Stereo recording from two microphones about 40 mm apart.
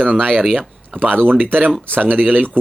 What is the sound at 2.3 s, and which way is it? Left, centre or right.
Speech, left.